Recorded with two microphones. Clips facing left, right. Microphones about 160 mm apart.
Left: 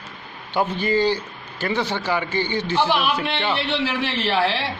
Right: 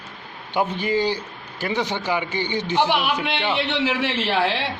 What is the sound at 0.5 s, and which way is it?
A man's voice, 15° right (ahead or behind).